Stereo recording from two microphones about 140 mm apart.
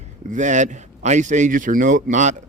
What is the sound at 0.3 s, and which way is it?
Speech, 60° right (ahead or behind).